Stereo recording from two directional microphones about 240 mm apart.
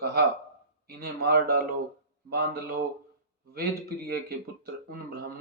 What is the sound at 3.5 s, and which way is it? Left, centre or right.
Speech, right.